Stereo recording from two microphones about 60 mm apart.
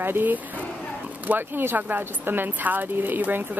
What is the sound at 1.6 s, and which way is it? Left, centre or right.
A woman's voice, right.